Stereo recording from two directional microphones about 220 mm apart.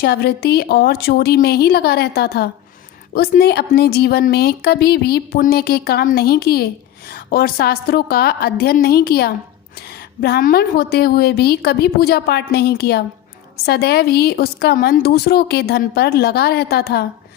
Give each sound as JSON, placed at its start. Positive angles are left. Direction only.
{"t": 0.0, "sound": "a woman's voice", "side_deg": 45}